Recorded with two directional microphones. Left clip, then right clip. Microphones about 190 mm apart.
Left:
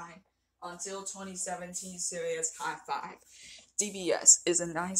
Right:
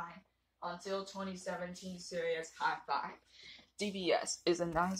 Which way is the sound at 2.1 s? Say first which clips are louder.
Left 2 dB; 45° left (ahead or behind).